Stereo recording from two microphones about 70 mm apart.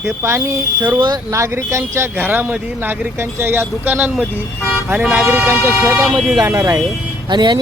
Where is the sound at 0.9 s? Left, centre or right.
Right.